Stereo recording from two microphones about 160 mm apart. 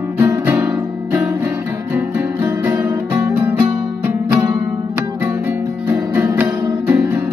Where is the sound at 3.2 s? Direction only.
15° right (ahead or behind).